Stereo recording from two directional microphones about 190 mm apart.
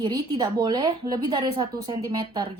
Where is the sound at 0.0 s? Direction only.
25° right (ahead or behind).